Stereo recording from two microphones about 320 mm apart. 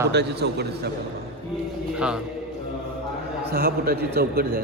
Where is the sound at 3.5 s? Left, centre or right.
Right.